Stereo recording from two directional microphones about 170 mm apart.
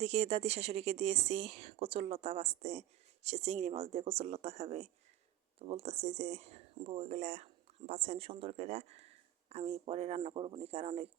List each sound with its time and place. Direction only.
0.0 s speech: 40° right (ahead or behind)